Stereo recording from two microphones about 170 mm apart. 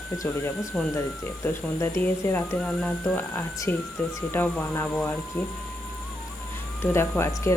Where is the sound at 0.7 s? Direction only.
Centre (ahead or behind).